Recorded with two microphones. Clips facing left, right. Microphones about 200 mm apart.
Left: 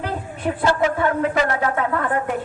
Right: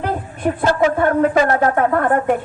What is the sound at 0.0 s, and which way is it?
A woman's voice, 50° right (ahead or behind).